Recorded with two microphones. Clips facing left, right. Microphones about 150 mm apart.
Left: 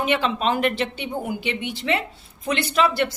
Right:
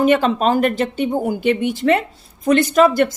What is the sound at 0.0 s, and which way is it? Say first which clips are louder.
A woman's voice: right 7 dB; 45° right (ahead or behind).